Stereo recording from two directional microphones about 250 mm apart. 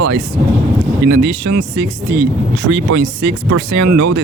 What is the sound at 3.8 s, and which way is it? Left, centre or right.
Speech, right.